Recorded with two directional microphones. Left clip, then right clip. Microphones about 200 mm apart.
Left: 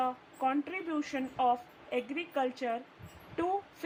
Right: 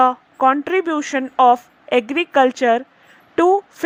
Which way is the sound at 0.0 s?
45° right (ahead or behind).